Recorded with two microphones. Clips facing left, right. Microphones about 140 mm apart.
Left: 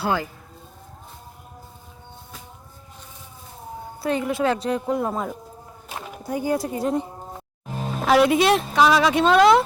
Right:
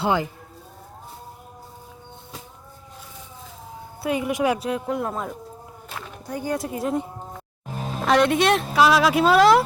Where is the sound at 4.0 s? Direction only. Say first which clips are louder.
Even; 10° right (ahead or behind).